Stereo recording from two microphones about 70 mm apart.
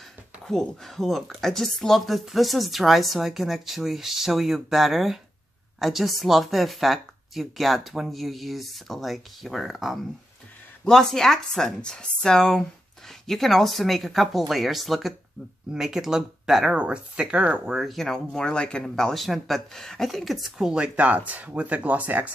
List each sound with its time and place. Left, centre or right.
0.5 s speech: centre
17.7 s speech: centre; by 22.3 s right